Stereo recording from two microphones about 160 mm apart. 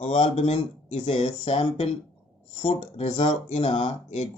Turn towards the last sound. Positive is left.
turn(degrees=45)  # may be behind; listen again after turning